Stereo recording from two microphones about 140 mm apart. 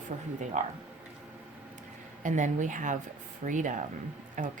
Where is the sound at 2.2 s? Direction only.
60° right (ahead or behind).